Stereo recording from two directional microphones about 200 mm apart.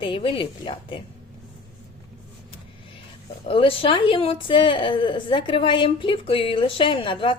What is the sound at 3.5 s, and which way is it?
A woman's voice, 25° left (ahead or behind).